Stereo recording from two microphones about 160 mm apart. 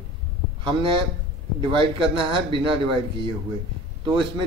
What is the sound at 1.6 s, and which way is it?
A man's voice, 30° right (ahead or behind).